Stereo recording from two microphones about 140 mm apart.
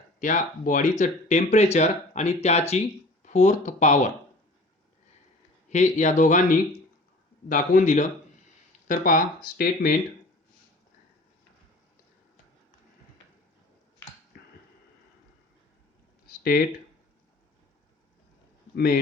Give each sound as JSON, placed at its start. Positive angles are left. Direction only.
{"t": 0.2, "sound": "speech", "side_deg": 65}
{"t": 5.6, "sound": "speech", "side_deg": 60}
{"t": 7.4, "sound": "a man's voice", "side_deg": 80}
{"t": 14.3, "sound": "tick-tock", "side_deg": 90}
{"t": 16.4, "sound": "speech", "side_deg": 90}